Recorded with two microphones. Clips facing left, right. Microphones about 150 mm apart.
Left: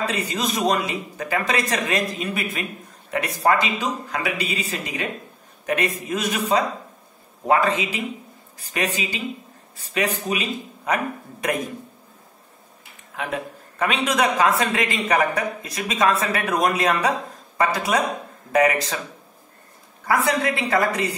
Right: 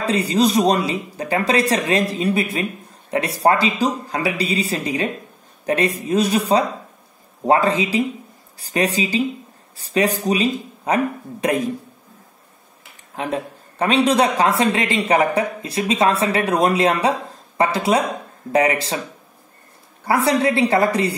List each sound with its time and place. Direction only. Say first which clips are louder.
0.0 s speech: right 7 dB; 35° right (ahead or behind)
13.1 s speech: right 4 dB; 30° right (ahead or behind)
20.1 s speech: right 4 dB; 30° right (ahead or behind)